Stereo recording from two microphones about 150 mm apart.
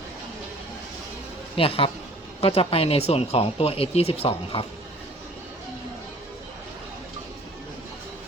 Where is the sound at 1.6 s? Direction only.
40° left (ahead or behind).